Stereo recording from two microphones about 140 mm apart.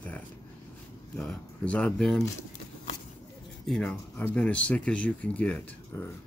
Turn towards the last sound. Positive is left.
turn(degrees=10)  # may be behind; listen again after turning